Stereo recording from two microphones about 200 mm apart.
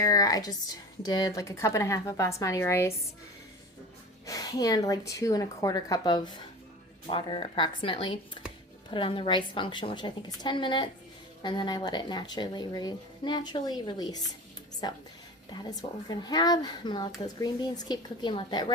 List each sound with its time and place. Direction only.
0.0 s a woman's voice: 20° left (ahead or behind)
4.3 s a woman's voice: 20° left (ahead or behind)
15.7 s a woman's voice: 20° left (ahead or behind)